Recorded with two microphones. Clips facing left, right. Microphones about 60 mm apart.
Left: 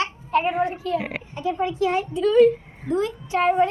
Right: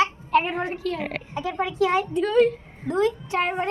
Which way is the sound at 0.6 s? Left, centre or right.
Right.